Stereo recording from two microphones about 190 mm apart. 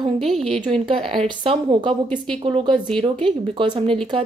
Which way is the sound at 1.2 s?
25° right (ahead or behind).